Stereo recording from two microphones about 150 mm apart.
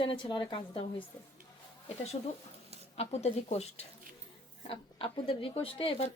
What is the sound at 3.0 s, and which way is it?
Speech, 45° left (ahead or behind).